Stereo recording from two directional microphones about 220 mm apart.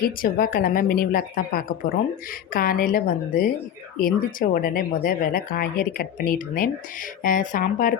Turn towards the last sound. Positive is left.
turn(degrees=40)  # may be behind; listen again after turning